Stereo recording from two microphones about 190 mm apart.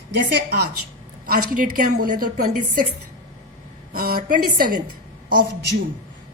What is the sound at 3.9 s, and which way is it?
Speech, 50° right (ahead or behind).